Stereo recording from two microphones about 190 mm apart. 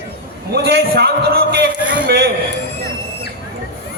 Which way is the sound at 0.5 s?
55° right (ahead or behind).